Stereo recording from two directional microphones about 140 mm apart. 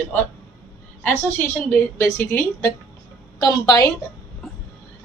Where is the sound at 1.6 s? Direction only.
15° left (ahead or behind).